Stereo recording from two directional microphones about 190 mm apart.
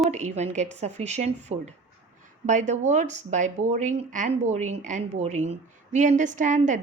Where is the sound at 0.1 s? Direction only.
35° right (ahead or behind).